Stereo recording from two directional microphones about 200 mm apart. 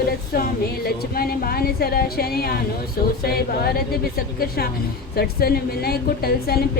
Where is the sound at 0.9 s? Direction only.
50° left (ahead or behind).